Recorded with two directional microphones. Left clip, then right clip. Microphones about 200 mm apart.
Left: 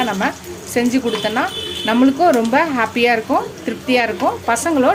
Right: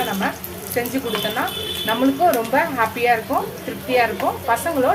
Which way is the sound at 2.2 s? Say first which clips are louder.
Left 2 dB; 55° left (ahead or behind).